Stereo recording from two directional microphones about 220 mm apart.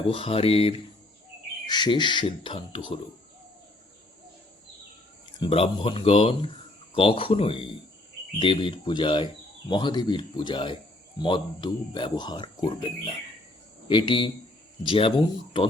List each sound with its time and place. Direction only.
0.0 s speech: 25° left (ahead or behind)
5.4 s speech: 25° left (ahead or behind)